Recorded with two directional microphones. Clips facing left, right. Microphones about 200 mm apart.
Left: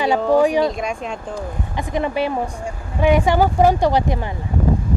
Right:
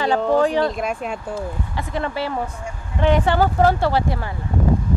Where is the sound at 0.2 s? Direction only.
10° left (ahead or behind).